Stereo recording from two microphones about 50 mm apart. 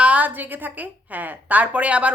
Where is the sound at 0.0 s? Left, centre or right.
Right.